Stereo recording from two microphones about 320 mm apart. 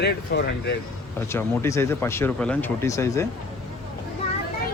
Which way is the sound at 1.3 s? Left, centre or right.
Centre.